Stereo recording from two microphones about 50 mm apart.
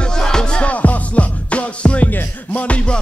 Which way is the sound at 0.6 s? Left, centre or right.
Left.